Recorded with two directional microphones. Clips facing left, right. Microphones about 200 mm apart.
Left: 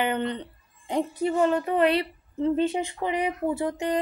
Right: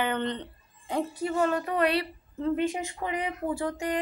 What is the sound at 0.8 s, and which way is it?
A woman's voice, 25° left (ahead or behind).